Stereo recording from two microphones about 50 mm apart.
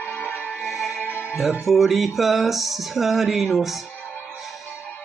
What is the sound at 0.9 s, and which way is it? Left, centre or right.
Music, left.